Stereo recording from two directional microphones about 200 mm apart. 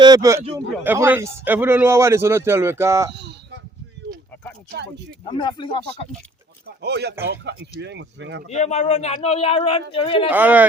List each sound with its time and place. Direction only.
0.0 s a man's voice: 20° right (ahead or behind)
5.3 s speech: 25° left (ahead or behind)
6.8 s speech: 55° right (ahead or behind)
8.4 s speech: 35° left (ahead or behind)
10.3 s a man's voice: 10° right (ahead or behind)